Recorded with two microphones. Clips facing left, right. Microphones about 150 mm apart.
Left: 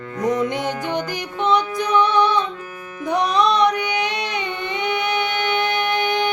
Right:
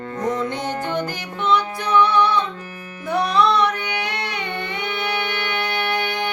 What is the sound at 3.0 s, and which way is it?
Music, 15° left (ahead or behind).